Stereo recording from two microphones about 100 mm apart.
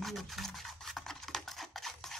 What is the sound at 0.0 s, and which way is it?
Toothbrush, centre (ahead or behind).